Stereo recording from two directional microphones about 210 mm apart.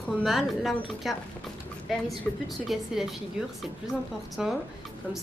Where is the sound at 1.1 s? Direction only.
Centre (ahead or behind).